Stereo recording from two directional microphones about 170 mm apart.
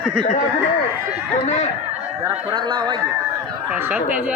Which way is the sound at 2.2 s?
25° right (ahead or behind).